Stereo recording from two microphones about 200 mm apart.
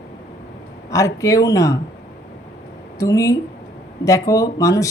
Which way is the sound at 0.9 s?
15° left (ahead or behind).